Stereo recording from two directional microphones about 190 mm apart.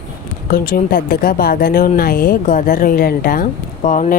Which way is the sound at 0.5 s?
50° left (ahead or behind).